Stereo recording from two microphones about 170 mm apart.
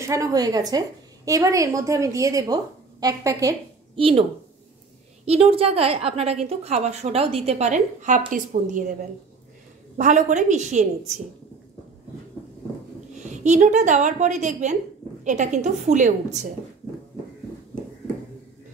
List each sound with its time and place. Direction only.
0.0 s a woman's voice: 20° right (ahead or behind)
3.9 s a woman's voice: 30° right (ahead or behind); by 8.9 s 50° right (ahead or behind)
9.9 s a woman's voice: 45° right (ahead or behind)
13.2 s a woman's voice: 45° right (ahead or behind)